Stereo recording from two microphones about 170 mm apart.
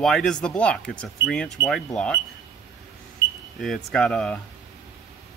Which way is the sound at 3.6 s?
5° left (ahead or behind).